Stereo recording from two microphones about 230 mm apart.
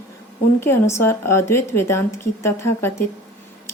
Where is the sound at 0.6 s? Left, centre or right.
Centre.